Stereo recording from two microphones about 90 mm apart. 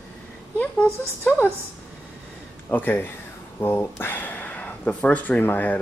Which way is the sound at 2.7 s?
20° left (ahead or behind).